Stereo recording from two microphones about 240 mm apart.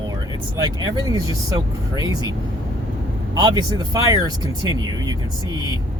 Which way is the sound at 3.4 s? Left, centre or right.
Centre.